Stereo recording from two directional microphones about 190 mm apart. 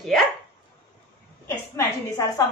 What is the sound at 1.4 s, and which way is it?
Speech, 15° left (ahead or behind).